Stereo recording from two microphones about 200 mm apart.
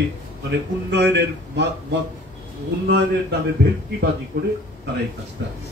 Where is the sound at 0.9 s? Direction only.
60° right (ahead or behind).